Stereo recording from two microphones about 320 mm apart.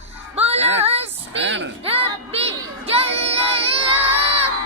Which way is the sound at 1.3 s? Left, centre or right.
Right.